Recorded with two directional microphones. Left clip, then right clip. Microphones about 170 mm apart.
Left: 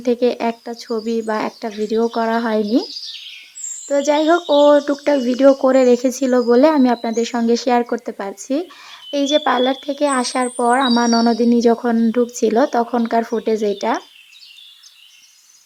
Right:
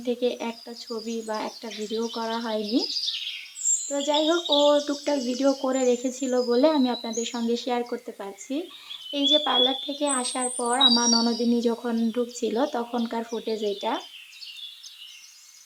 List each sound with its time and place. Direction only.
0.0 s speech: 40° left (ahead or behind)
1.8 s speech: 50° left (ahead or behind)
3.8 s speech: 40° left (ahead or behind)